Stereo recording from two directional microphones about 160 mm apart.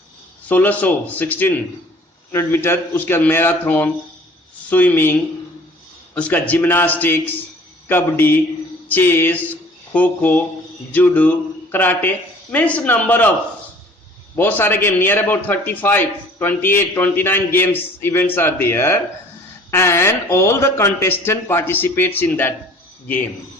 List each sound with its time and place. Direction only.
0.4 s a man's voice: 10° left (ahead or behind)
6.1 s a man's voice: 10° left (ahead or behind)
14.3 s a man's voice: 10° left (ahead or behind)